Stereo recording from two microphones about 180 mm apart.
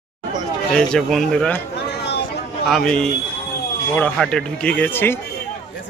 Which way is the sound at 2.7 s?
5° left (ahead or behind).